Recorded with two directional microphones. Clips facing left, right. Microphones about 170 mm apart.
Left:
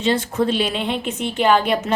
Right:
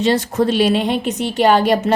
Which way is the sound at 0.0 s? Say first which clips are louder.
Right 3 dB; 40° right (ahead or behind).